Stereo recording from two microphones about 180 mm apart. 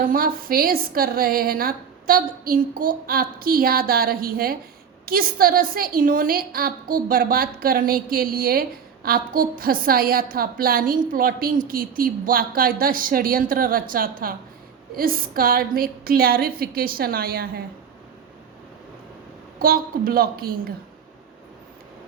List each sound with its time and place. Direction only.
0.0 s a woman's voice: 50° right (ahead or behind)
19.5 s a woman's voice: 55° right (ahead or behind)